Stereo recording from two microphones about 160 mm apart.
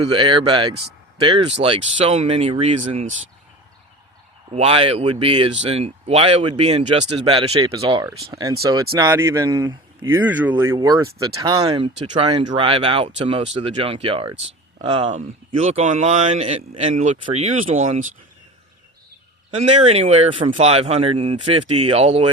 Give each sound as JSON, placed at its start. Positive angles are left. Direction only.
{"t": 0.2, "sound": "speech", "side_deg": -30}
{"t": 4.5, "sound": "speech", "side_deg": -40}
{"t": 8.0, "sound": "speech", "side_deg": -20}
{"t": 10.2, "sound": "speech", "side_deg": -10}
{"t": 19.5, "sound": "speech", "side_deg": -40}